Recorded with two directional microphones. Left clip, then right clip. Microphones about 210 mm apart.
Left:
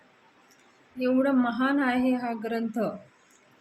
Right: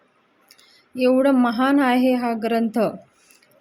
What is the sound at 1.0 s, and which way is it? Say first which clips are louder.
A woman's voice: right 8 dB; 45° right (ahead or behind).